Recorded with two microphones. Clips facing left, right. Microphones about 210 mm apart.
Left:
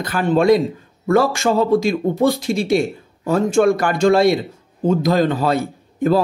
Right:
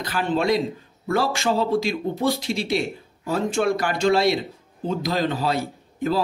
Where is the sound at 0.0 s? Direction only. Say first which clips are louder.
Left 7 dB; 50° left (ahead or behind).